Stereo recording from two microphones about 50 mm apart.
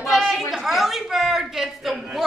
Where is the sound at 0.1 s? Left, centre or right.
Centre.